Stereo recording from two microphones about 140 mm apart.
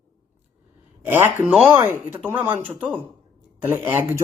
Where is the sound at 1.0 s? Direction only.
15° right (ahead or behind).